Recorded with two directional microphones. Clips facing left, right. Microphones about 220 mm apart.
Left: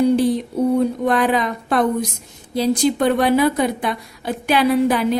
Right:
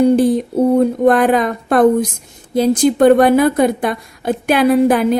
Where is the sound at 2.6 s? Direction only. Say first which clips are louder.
Right 6 dB; 50° right (ahead or behind).